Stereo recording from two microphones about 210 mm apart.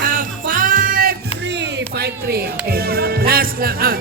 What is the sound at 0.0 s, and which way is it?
Music, 40° right (ahead or behind).